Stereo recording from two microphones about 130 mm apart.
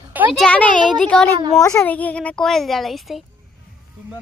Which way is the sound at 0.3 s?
10° left (ahead or behind).